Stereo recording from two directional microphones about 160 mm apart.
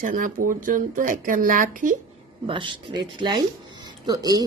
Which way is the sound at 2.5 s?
30° right (ahead or behind).